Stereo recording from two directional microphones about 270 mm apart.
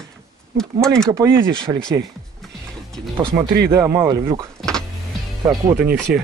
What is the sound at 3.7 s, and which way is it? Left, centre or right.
Speech, centre.